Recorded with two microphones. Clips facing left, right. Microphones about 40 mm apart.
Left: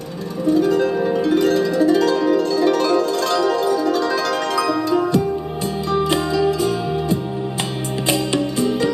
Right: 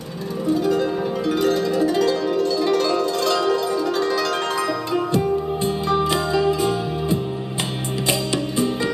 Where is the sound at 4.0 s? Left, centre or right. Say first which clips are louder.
Left 1 dB; left.